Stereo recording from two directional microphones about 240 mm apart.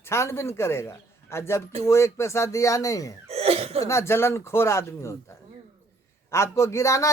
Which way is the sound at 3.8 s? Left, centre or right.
Centre.